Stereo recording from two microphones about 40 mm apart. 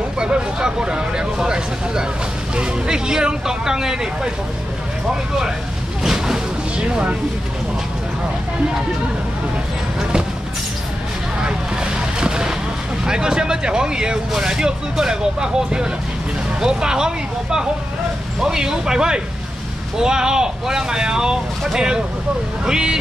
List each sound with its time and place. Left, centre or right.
0.2 s speech: right
6.0 s a sound: centre
6.8 s speech: right
11.4 s vehicle: right
13.0 s speech: centre